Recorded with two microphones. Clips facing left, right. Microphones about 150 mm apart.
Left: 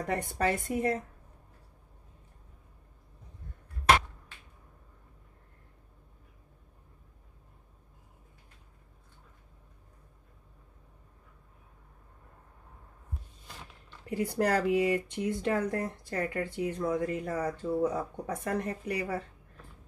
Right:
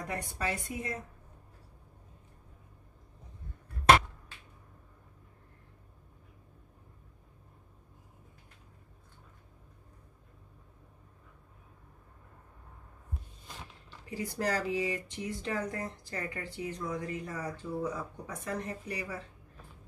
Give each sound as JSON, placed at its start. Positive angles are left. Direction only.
{"t": 0.1, "sound": "a woman's voice", "side_deg": 55}
{"t": 14.1, "sound": "speech", "side_deg": 55}